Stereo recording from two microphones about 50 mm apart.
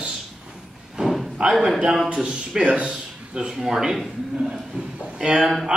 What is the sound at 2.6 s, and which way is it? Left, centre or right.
Speech, right.